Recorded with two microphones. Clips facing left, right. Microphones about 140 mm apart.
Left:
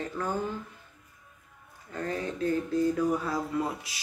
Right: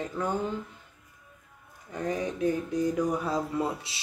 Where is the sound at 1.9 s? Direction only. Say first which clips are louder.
Right 2 dB; 15° right (ahead or behind).